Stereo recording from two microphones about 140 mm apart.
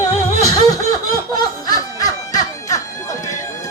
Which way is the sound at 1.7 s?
25° left (ahead or behind).